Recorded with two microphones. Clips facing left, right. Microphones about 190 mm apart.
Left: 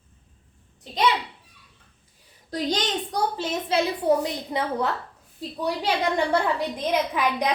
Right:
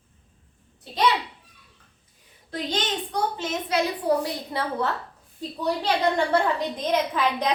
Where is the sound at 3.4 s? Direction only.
25° left (ahead or behind).